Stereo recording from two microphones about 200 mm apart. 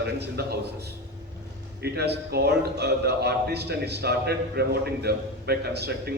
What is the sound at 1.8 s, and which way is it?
A man's voice, 55° right (ahead or behind).